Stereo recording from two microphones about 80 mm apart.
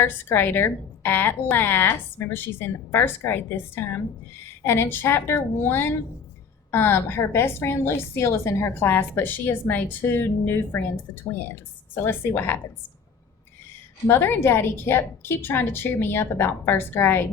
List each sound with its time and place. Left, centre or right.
0.0 s a woman's voice: left
14.1 s a woman's voice: left